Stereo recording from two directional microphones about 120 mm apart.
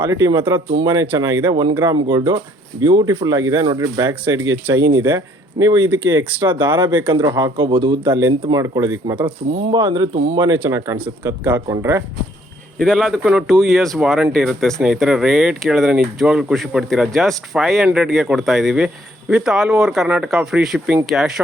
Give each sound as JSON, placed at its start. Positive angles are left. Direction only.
{"t": 0.1, "sound": "speech", "side_deg": -35}
{"t": 8.6, "sound": "speech", "side_deg": -30}
{"t": 9.2, "sound": "speech", "side_deg": -40}
{"t": 12.8, "sound": "speech", "side_deg": 5}